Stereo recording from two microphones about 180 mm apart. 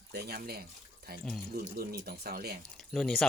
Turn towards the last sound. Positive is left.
turn(degrees=0)  # may be behind; listen again after turning